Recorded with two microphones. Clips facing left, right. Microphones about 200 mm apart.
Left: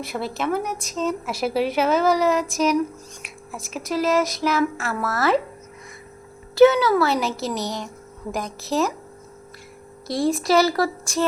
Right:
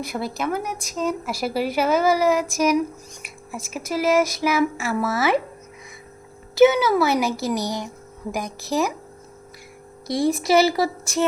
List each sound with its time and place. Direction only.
0.1 s speech: centre (ahead or behind)
6.6 s speech: 20° right (ahead or behind)
10.1 s a woman's voice: 20° right (ahead or behind)